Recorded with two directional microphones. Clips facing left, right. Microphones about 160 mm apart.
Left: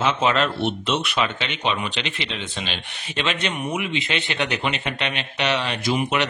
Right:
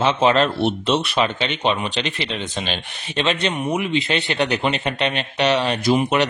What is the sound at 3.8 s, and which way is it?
Speech, 35° right (ahead or behind).